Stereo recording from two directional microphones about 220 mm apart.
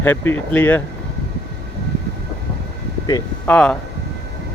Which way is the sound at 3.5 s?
5° left (ahead or behind).